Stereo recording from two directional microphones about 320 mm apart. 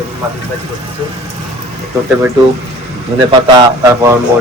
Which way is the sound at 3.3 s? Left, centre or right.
Centre.